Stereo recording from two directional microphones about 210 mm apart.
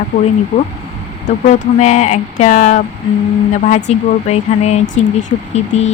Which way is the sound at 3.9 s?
30° left (ahead or behind).